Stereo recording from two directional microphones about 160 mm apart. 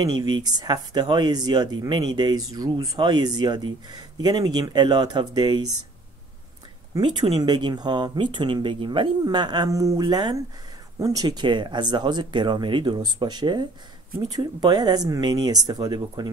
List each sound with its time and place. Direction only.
0.0 s speech: 25° right (ahead or behind)
6.9 s speech: 30° right (ahead or behind)